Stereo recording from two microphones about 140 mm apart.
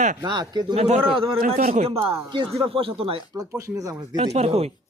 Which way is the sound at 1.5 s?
80° right.